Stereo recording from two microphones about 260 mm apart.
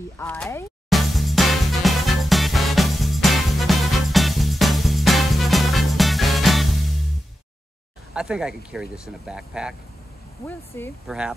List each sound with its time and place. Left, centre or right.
0.2 s music: centre
8.1 s speech: centre
10.7 s speech: centre
11.1 s speech: centre